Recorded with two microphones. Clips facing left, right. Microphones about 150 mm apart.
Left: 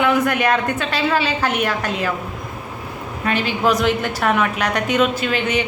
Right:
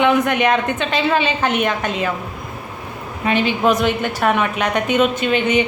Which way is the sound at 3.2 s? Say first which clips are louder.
Right 2 dB; 15° right (ahead or behind).